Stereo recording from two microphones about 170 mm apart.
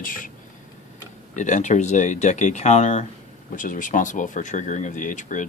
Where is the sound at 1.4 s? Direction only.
45° left (ahead or behind).